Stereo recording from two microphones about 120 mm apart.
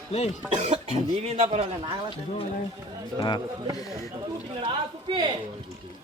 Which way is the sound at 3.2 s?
40° left (ahead or behind).